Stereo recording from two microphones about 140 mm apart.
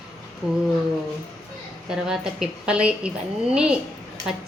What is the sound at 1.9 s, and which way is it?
Speech, 5° right (ahead or behind).